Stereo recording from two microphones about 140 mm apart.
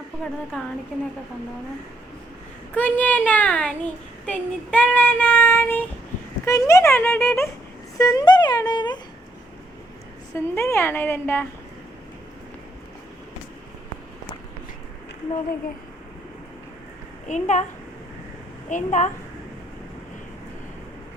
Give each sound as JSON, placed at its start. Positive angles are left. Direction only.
{"t": 0.5, "sound": "speech", "side_deg": 5}
{"t": 2.7, "sound": "child singing", "side_deg": 10}
{"t": 7.9, "sound": "a sound", "side_deg": 25}
{"t": 10.3, "sound": "child singing", "side_deg": 15}
{"t": 17.2, "sound": "a woman's voice", "side_deg": 60}
{"t": 18.7, "sound": "a woman's voice", "side_deg": 60}